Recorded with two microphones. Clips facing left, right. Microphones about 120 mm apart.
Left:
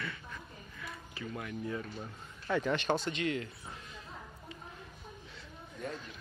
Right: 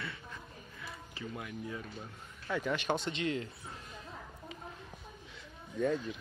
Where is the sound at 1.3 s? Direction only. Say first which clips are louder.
Left 4 dB; 10° right (ahead or behind).